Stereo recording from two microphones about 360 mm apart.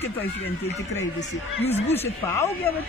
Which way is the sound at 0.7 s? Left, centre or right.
Centre.